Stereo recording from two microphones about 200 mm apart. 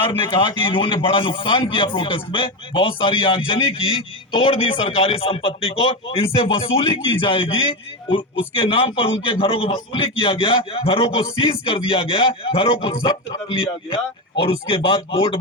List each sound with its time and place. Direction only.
0.3 s a man's voice: 25° left (ahead or behind)